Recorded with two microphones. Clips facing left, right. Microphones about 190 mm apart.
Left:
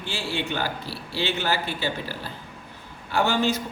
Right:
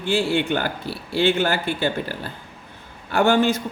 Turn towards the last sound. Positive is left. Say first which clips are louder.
# right 5 dB
turn(degrees=-50)  # may be behind; listen again after turning